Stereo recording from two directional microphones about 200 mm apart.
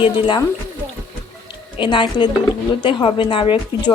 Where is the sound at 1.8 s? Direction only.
25° left (ahead or behind).